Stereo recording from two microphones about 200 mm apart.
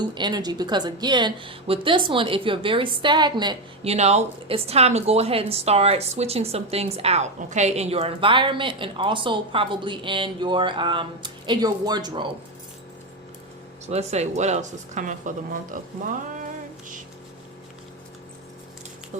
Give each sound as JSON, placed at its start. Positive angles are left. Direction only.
{"t": 0.0, "sound": "a woman's voice", "side_deg": -20}
{"t": 3.9, "sound": "a woman's voice", "side_deg": -35}
{"t": 13.8, "sound": "speech", "side_deg": -35}
{"t": 19.1, "sound": "speech", "side_deg": -35}